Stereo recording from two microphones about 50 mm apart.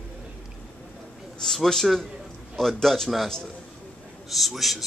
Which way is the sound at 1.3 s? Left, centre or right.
Centre.